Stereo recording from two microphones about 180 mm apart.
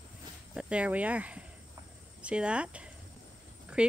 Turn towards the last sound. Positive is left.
turn(degrees=-5)  # may be behind; listen again after turning